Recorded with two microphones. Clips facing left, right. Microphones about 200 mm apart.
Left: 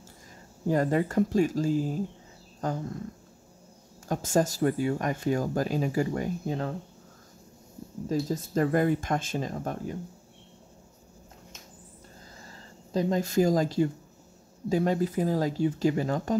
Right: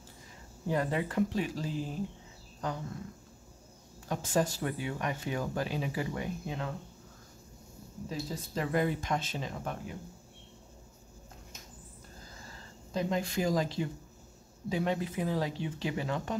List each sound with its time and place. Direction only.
0.7 s speech: 45° left (ahead or behind)
4.1 s speech: 45° left (ahead or behind)
8.1 s speech: 45° left (ahead or behind)
12.9 s speech: 40° left (ahead or behind)